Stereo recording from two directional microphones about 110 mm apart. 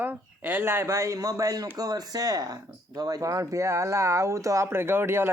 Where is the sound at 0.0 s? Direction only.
15° right (ahead or behind).